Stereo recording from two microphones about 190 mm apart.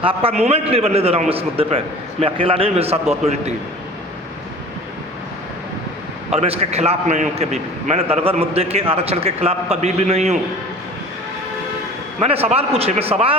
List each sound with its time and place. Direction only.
0.0 s a man's voice: 30° right (ahead or behind)
6.3 s a man's voice: 30° right (ahead or behind)
12.2 s a man's voice: 30° right (ahead or behind)